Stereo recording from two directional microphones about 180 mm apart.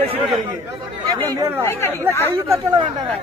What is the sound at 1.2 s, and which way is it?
Speech, 20° right (ahead or behind).